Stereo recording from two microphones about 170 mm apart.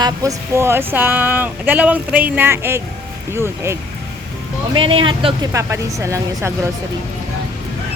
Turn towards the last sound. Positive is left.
turn(degrees=-15)  # may be behind; listen again after turning